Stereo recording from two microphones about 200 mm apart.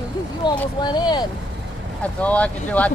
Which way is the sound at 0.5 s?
20° left (ahead or behind).